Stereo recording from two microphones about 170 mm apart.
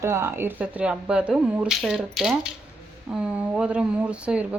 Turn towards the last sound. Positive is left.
turn(degrees=-5)  # may be behind; listen again after turning